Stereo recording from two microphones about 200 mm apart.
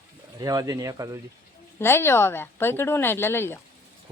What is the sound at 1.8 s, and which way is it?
Speech, 10° left (ahead or behind).